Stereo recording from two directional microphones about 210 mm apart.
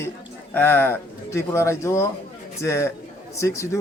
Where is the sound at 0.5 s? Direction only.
10° left (ahead or behind).